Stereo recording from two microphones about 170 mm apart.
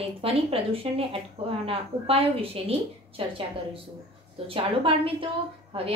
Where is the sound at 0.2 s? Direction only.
35° right (ahead or behind).